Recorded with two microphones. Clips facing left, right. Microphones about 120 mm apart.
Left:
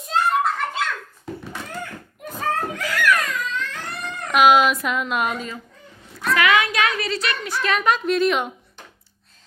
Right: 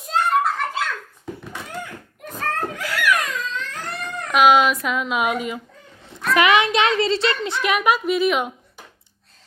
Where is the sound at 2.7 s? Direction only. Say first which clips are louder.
Even; 5° right (ahead or behind).